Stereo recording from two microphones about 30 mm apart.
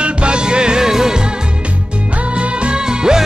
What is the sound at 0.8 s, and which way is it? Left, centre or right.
Music, centre.